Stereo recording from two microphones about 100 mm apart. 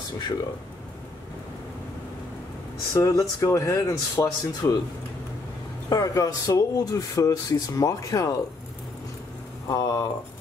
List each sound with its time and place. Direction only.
2.9 s speech: 35° left (ahead or behind)
5.9 s speech: 35° left (ahead or behind)
9.7 s speech: 40° left (ahead or behind)